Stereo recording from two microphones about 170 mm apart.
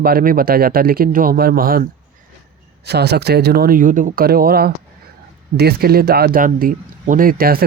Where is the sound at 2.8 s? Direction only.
75° right (ahead or behind).